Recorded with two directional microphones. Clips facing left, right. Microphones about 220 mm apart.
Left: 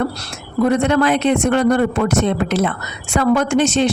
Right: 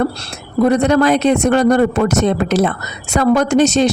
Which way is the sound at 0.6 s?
35° right (ahead or behind).